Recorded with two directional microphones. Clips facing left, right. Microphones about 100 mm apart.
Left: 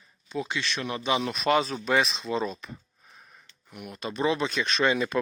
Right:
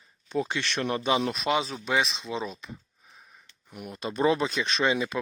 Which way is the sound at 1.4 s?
15° right (ahead or behind).